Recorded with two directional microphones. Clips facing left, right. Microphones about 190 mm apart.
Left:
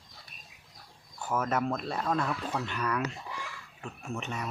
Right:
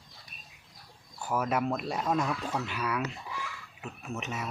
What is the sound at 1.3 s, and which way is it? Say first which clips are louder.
Speech: even; 10° right (ahead or behind).